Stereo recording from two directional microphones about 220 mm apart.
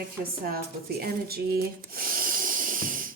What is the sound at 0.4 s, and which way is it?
Speech, 45° right (ahead or behind).